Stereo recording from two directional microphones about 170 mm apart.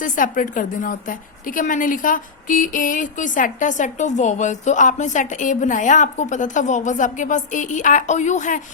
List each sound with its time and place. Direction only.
0.0 s a woman's voice: 50° left (ahead or behind)